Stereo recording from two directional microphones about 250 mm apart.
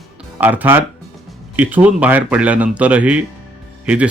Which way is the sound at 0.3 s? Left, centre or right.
Centre.